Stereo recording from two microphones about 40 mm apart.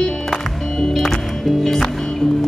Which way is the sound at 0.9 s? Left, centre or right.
Centre.